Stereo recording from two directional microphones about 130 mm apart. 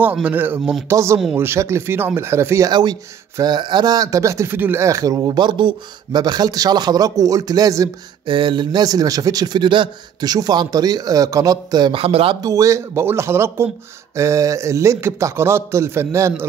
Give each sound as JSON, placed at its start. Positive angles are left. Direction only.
{"t": 0.0, "sound": "speech", "side_deg": -15}
{"t": 2.7, "sound": "speech", "side_deg": -30}
{"t": 8.3, "sound": "a man's voice", "side_deg": -40}
{"t": 12.4, "sound": "speech", "side_deg": -25}